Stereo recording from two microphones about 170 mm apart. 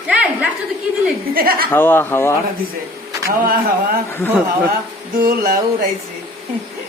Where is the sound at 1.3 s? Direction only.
60° right (ahead or behind).